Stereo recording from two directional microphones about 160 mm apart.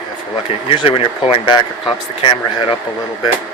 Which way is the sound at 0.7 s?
35° left (ahead or behind).